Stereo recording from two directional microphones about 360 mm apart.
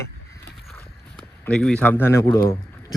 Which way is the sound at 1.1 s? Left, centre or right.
Centre.